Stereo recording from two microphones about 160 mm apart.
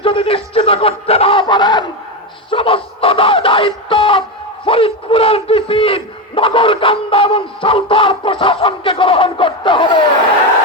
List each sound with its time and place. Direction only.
0.0 s a man's voice: 35° left (ahead or behind)
2.5 s a sound: 35° left (ahead or behind)
4.6 s a man's voice: 35° left (ahead or behind)